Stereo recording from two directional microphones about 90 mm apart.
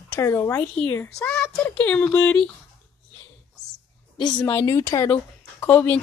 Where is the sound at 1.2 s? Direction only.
15° left (ahead or behind).